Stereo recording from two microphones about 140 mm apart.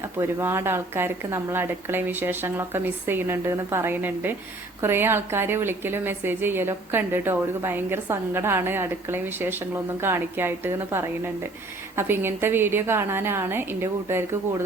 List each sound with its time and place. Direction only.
0.0 s a woman's voice: 15° right (ahead or behind)